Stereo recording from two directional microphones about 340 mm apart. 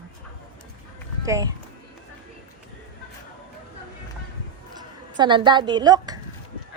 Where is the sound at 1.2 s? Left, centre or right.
Centre.